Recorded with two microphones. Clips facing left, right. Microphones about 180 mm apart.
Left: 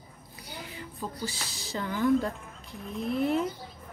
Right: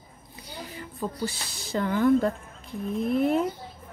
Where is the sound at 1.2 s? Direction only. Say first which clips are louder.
Right 4 dB; 55° right (ahead or behind).